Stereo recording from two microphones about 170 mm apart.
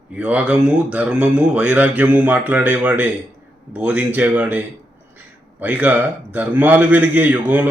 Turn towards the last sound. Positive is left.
turn(degrees=-10)  # may be behind; listen again after turning